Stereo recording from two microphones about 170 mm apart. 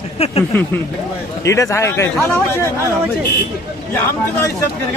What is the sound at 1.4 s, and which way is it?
Speech, 20° left (ahead or behind).